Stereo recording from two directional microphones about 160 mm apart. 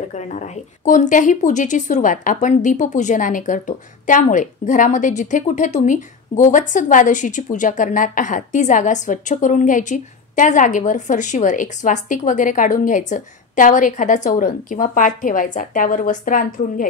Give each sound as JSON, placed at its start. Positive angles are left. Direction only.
{"t": 0.1, "sound": "speech", "side_deg": 50}